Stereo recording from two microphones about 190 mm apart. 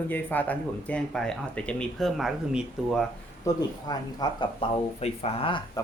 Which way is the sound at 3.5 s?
20° left (ahead or behind).